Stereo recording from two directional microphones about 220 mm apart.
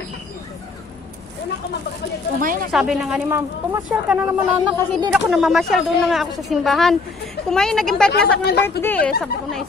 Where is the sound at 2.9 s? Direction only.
5° right (ahead or behind).